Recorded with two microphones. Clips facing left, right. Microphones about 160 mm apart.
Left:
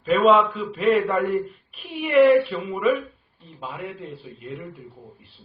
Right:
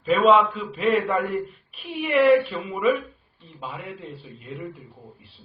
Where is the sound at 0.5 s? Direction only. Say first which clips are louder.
Left 3 dB; 40° left (ahead or behind).